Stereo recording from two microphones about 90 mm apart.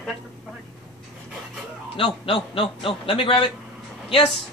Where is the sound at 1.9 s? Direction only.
90° left.